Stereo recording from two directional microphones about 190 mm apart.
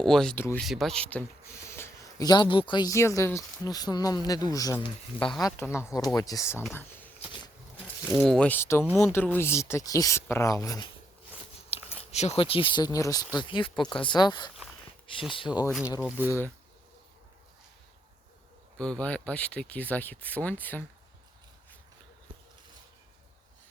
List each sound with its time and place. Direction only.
0.0 s speech: 5° left (ahead or behind)
8.2 s speech: 5° left (ahead or behind)
11.7 s speech: 30° left (ahead or behind)
16.0 s speech: 10° right (ahead or behind)
18.8 s speech: 5° left (ahead or behind)